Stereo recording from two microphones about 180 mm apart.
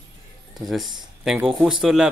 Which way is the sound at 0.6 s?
Centre (ahead or behind).